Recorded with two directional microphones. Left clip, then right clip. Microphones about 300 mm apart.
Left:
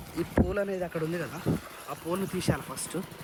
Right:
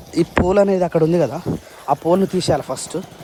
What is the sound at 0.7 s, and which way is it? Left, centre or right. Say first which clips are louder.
Speech: right 16 dB; right.